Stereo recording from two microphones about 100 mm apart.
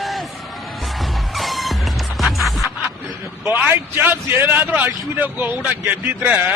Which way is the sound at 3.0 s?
20° right (ahead or behind).